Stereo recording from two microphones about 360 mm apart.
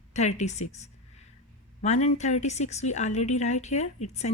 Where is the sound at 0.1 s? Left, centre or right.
Centre.